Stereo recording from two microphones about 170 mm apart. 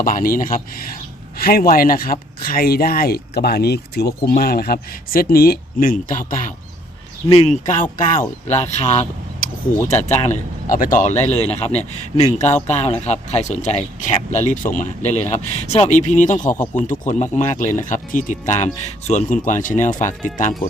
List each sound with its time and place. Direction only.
0.0 s speech: 55° left (ahead or behind)
7.3 s speech: 40° left (ahead or behind)